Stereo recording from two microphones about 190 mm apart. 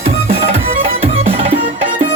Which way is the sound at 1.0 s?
30° right (ahead or behind).